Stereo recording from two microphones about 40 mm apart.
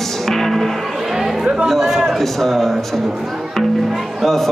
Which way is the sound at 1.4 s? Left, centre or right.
Right.